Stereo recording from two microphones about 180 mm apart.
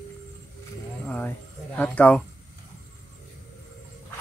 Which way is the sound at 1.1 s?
10° left (ahead or behind).